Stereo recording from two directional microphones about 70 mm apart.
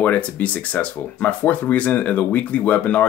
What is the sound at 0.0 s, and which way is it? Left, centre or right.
Speech, left.